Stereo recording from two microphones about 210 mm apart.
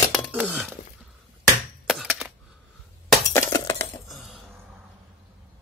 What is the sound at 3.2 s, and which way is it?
Glass, 15° left (ahead or behind).